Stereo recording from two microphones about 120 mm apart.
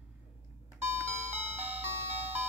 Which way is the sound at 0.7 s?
20° right (ahead or behind).